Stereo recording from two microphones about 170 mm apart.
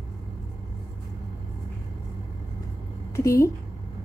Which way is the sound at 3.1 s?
15° left (ahead or behind).